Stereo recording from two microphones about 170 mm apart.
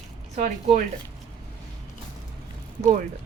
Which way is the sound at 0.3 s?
45° right (ahead or behind).